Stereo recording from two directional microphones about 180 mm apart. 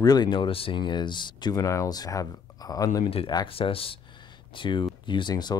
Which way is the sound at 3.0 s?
30° left (ahead or behind).